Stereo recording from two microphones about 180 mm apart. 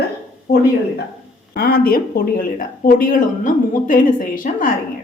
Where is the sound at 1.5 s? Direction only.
55° left (ahead or behind).